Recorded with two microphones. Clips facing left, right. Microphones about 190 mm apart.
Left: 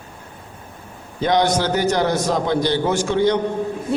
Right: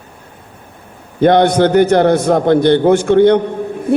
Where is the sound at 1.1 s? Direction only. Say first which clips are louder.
Right 8 dB; 60° right (ahead or behind).